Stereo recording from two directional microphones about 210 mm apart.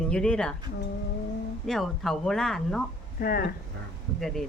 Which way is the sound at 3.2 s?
45° left (ahead or behind).